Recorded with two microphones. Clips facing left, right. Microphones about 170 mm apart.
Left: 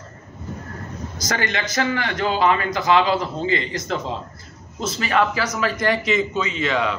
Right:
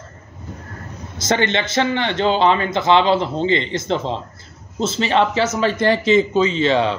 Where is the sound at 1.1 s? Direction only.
25° right (ahead or behind).